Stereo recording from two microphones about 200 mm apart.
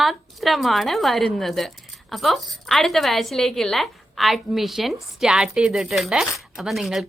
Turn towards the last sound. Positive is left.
turn(degrees=0)  # may be behind; listen again after turning